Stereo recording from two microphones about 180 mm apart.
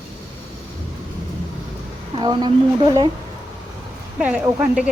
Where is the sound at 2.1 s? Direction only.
25° right (ahead or behind).